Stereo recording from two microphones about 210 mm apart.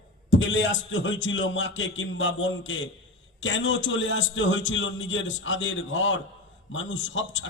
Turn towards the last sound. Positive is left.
turn(degrees=65)  # may be behind; listen again after turning